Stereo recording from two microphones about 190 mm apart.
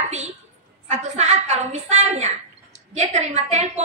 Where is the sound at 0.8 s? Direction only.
35° right (ahead or behind).